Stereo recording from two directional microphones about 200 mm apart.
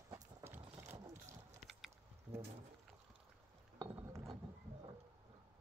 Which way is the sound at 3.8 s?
15° right (ahead or behind).